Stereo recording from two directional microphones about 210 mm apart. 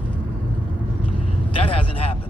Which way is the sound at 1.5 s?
25° left (ahead or behind).